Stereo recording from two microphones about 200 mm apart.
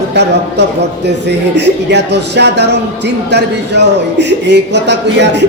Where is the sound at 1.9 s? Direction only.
60° right (ahead or behind).